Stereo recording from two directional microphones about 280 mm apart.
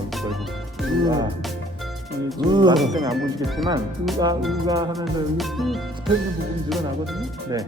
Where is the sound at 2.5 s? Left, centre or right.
Centre.